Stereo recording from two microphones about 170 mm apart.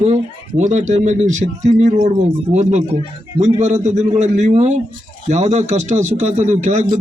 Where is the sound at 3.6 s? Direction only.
45° right (ahead or behind).